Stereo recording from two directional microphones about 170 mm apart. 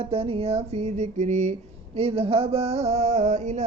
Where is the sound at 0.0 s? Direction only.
35° right (ahead or behind).